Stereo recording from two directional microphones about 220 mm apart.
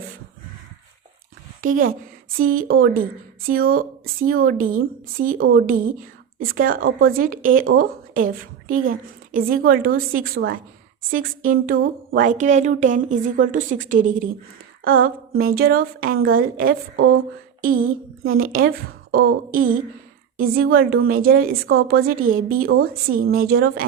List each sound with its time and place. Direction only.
1.6 s a woman's voice: 40° right (ahead or behind)